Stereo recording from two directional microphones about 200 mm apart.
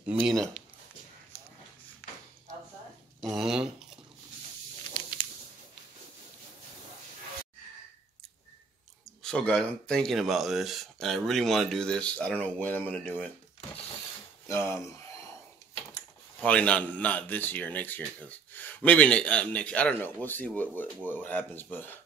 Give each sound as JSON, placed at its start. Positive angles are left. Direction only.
{"t": 0.0, "sound": "speech", "side_deg": -5}
{"t": 3.3, "sound": "speech", "side_deg": 0}
{"t": 5.2, "sound": "a sound", "side_deg": 20}
{"t": 9.2, "sound": "speech", "side_deg": 5}
{"t": 14.5, "sound": "speech", "side_deg": 15}
{"t": 16.3, "sound": "speech", "side_deg": 5}